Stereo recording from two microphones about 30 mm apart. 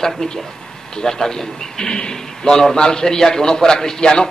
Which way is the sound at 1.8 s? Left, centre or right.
Left.